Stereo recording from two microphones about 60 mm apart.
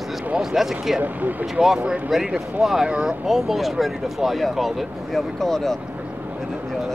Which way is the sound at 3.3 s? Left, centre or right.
Centre.